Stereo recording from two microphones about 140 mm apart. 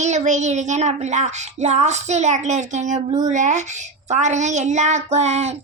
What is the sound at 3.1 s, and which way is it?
Speech, 30° right (ahead or behind).